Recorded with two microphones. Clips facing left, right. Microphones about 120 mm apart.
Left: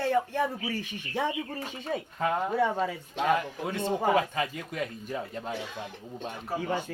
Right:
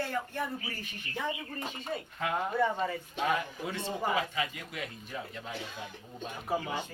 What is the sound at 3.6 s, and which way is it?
A man's voice, 55° left (ahead or behind).